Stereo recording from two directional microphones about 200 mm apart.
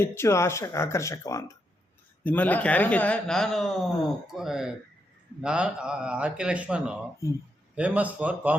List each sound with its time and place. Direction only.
0.0 s speech: 10° left (ahead or behind); by 7.0 s 5° right (ahead or behind)
7.2 s speech: 15° left (ahead or behind)
7.8 s speech: 5° right (ahead or behind)